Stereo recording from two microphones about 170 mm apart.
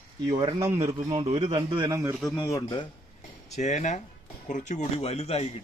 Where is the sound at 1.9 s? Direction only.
15° right (ahead or behind).